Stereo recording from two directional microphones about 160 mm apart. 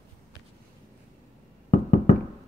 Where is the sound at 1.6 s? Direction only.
55° left (ahead or behind).